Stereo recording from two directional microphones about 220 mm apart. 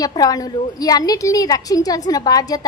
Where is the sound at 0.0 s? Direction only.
15° left (ahead or behind).